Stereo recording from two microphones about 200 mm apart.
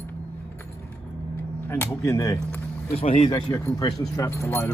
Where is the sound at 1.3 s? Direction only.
10° left (ahead or behind).